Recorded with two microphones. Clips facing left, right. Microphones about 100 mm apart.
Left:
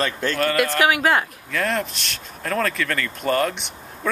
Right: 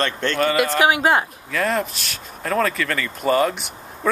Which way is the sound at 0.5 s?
20° right (ahead or behind).